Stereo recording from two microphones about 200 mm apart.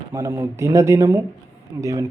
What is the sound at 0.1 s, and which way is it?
A man's voice, 15° right (ahead or behind).